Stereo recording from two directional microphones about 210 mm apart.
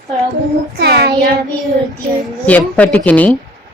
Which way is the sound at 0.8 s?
50° right (ahead or behind).